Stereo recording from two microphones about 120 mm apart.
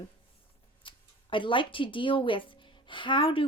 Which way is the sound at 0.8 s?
45° left (ahead or behind).